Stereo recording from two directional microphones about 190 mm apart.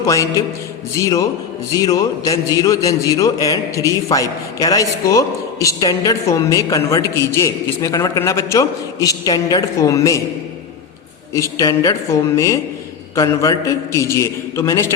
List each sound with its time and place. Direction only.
0.0 s a man's voice: 15° left (ahead or behind)
11.3 s a man's voice: 15° left (ahead or behind)